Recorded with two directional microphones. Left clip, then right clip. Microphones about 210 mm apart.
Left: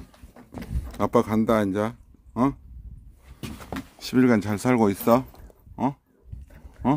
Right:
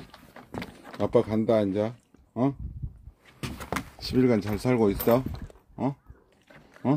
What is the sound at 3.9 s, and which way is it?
Speech, 20° left (ahead or behind).